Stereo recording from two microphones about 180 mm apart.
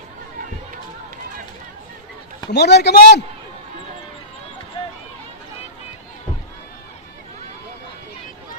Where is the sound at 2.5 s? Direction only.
70° left (ahead or behind).